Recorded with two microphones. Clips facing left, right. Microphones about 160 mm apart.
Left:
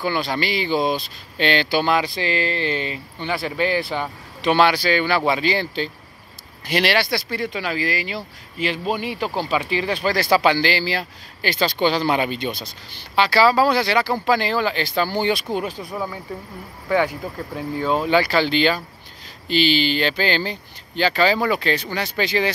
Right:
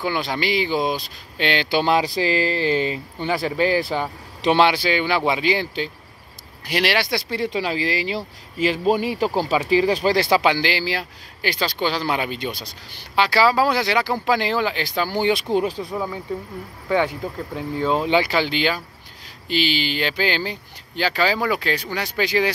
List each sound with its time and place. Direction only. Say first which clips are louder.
0.0 s speech: left 1 dB; 15° right (ahead or behind)
1.8 s speech: right 1 dB; 30° right (ahead or behind)
15.5 s speech: right 4 dB; 30° right (ahead or behind)
15.9 s speech: right 1 dB; centre (ahead or behind)
18.0 s speech: left 1 dB; 20° right (ahead or behind)